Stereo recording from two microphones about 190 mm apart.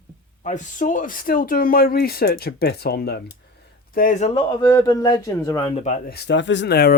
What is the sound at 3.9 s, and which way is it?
Speech, 40° left (ahead or behind).